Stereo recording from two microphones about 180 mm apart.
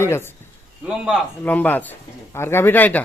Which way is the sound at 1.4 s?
10° left (ahead or behind).